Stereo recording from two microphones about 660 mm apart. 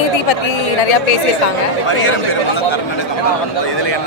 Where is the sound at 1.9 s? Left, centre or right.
Left.